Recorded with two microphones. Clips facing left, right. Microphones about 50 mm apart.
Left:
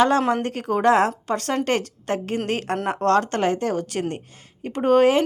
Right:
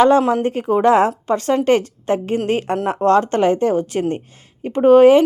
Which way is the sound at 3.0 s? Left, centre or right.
Centre.